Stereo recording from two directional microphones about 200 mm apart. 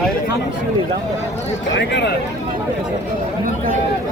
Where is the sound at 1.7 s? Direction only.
60° left (ahead or behind).